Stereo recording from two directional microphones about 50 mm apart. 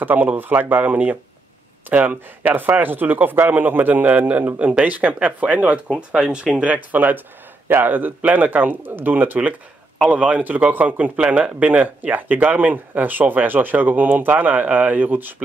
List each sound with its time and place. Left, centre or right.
0.0 s speech: right